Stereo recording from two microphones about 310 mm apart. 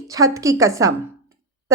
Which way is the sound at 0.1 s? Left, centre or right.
Centre.